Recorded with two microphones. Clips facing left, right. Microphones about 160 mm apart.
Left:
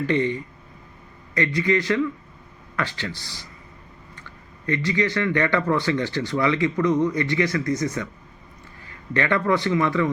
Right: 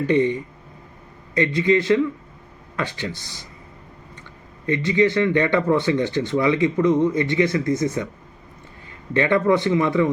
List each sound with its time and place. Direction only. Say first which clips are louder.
0.1 s speech: right 6 dB; 20° right (ahead or behind)
4.6 s speech: right 5 dB; 20° right (ahead or behind)
9.1 s speech: right 4 dB; 20° right (ahead or behind)